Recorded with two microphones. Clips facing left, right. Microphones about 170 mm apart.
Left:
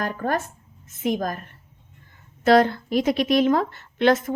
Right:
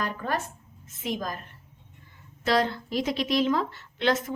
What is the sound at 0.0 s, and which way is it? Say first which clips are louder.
Speech: left 5 dB; 50° left (ahead or behind).